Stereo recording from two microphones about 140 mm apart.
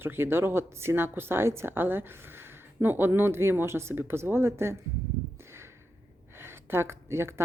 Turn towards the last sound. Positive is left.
turn(degrees=-20)  # may be behind; listen again after turning